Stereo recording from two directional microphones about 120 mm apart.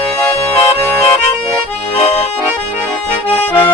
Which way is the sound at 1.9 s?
55° left (ahead or behind).